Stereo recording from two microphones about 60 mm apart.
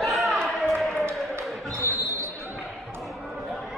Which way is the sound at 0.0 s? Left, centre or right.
Centre.